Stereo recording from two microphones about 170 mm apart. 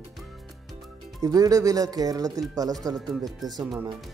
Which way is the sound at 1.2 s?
20° right (ahead or behind).